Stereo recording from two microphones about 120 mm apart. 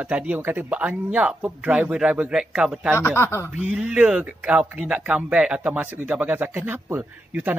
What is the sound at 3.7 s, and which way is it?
A man's voice, 10° right (ahead or behind).